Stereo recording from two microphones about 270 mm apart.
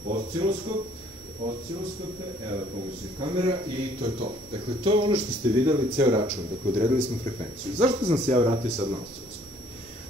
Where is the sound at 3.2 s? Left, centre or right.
Right.